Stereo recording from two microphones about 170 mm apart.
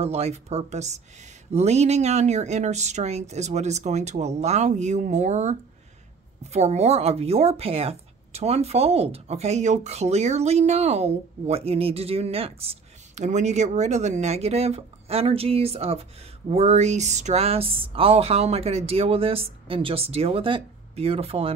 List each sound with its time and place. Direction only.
0.0 s speech: 35° right (ahead or behind)